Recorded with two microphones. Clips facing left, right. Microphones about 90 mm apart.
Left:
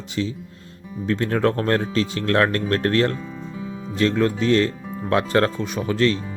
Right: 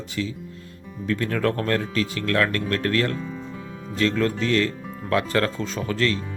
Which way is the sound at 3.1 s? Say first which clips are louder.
Even; centre (ahead or behind).